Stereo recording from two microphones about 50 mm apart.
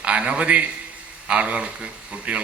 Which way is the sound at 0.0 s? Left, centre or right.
Right.